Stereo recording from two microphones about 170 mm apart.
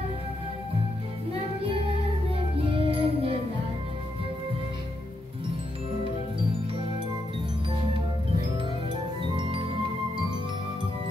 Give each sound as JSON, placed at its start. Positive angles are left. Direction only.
{"t": 2.5, "sound": "music", "side_deg": -30}
{"t": 9.2, "sound": "music", "side_deg": -30}